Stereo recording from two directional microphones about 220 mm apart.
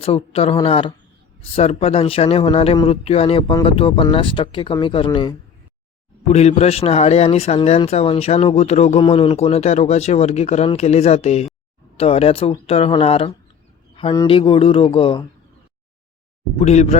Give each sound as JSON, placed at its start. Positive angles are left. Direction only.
{"t": 0.0, "sound": "speech", "side_deg": 25}
{"t": 16.6, "sound": "speech", "side_deg": 30}